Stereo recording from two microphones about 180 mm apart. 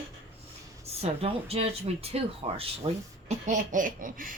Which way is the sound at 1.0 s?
35° right (ahead or behind).